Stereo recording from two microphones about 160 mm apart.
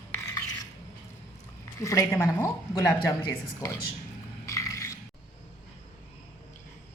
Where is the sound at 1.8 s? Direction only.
20° left (ahead or behind).